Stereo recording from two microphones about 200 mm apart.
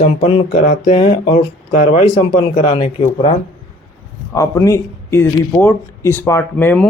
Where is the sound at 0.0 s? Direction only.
35° left (ahead or behind).